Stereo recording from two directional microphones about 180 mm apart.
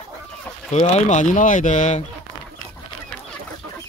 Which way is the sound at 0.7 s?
40° left (ahead or behind).